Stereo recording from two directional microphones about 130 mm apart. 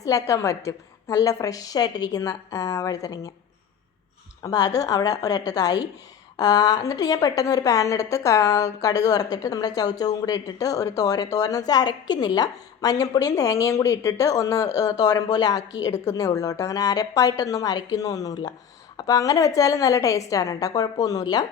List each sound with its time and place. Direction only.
0.0 s a woman's voice: 25° left (ahead or behind)
4.4 s a woman's voice: 30° left (ahead or behind)